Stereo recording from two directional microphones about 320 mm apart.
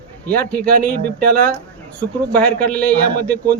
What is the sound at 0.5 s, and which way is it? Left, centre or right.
Speech, right.